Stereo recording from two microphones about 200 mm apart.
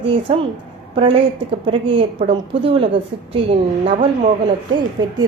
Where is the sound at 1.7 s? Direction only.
25° right (ahead or behind).